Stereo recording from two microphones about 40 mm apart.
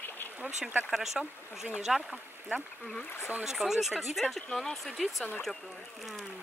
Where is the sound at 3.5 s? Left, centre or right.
Centre.